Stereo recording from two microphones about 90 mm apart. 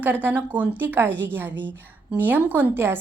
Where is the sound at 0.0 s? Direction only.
20° right (ahead or behind).